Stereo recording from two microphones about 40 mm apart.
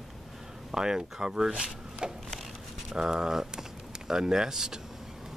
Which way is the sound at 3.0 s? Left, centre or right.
Centre.